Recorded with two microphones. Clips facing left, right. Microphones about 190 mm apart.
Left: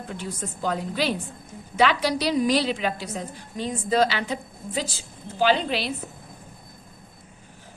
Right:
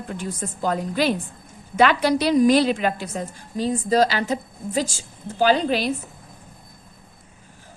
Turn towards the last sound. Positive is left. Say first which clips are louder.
# right 3 dB
turn(degrees=-45)  # may be behind; listen again after turning